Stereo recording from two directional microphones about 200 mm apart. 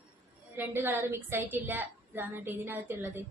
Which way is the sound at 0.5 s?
10° right (ahead or behind).